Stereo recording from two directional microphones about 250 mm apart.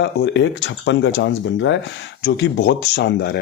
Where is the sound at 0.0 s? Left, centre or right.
Left.